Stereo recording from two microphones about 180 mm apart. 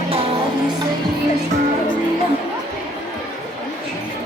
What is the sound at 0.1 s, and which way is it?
Music, 30° right (ahead or behind).